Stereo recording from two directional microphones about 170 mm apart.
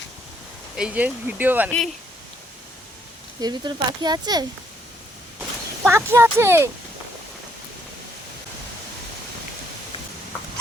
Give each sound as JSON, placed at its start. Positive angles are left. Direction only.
{"t": 0.8, "sound": "speech", "side_deg": -5}
{"t": 3.4, "sound": "speech", "side_deg": -25}
{"t": 5.4, "sound": "a sound", "side_deg": -10}